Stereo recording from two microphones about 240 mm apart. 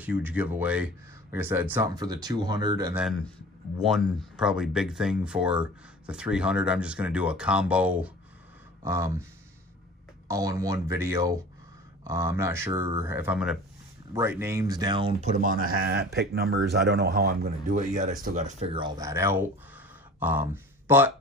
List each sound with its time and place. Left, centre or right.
0.0 s speech: centre
3.8 s speech: centre